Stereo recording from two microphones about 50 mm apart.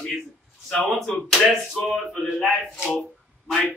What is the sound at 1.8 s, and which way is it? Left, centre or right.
Speech, centre.